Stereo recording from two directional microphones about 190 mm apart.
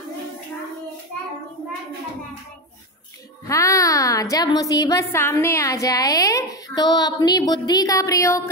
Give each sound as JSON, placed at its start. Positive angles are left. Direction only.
{"t": 3.4, "sound": "a woman's voice", "side_deg": 15}